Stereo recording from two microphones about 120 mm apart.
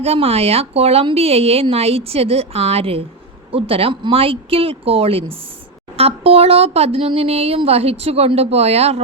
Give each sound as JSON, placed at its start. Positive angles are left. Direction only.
{"t": 0.0, "sound": "speech", "side_deg": -55}